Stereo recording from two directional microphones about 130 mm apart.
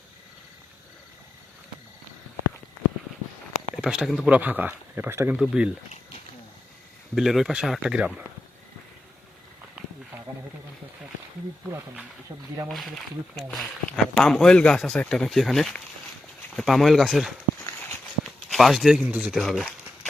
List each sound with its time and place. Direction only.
3.8 s speech: 5° right (ahead or behind)
4.4 s speech: 10° right (ahead or behind)
5.4 s speech: 5° right (ahead or behind)
7.2 s speech: centre (ahead or behind)
12.6 s speech: centre (ahead or behind)
17.7 s a sound: 15° left (ahead or behind)
18.5 s speech: centre (ahead or behind)